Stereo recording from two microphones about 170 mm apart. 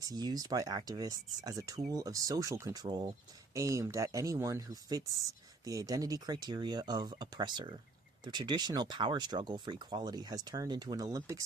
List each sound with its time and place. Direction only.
0.0 s speech: 25° right (ahead or behind)